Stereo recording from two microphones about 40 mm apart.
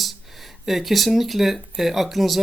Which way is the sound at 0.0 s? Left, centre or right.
Centre.